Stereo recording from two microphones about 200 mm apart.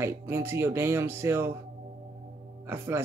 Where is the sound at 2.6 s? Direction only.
10° right (ahead or behind).